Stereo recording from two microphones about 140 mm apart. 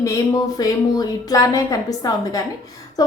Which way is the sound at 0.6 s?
25° left (ahead or behind).